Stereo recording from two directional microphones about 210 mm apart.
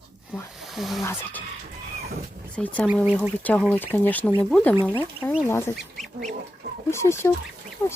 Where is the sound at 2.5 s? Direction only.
5° left (ahead or behind).